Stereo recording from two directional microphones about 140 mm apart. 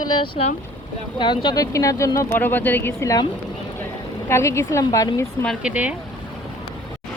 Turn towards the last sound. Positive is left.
turn(degrees=-10)  # may be behind; listen again after turning